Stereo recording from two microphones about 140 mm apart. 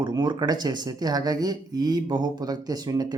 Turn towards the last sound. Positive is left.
turn(degrees=-30)  # may be behind; listen again after turning